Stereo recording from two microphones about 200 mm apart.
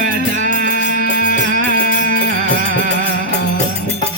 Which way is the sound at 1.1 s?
40° left (ahead or behind).